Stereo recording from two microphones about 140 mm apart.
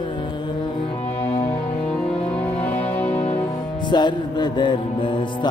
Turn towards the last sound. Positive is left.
turn(degrees=35)  # may be behind; listen again after turning